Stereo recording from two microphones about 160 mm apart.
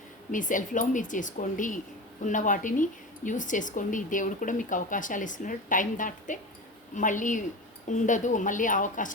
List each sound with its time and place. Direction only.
0.3 s speech: 55° left (ahead or behind)